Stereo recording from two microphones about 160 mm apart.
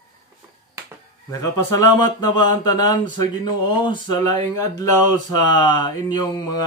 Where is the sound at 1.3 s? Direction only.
20° left (ahead or behind).